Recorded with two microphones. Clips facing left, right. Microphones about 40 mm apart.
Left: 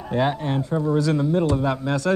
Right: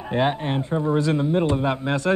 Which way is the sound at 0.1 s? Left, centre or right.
Right.